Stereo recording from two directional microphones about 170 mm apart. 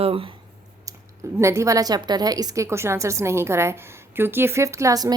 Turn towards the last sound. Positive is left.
turn(degrees=-20)  # may be behind; listen again after turning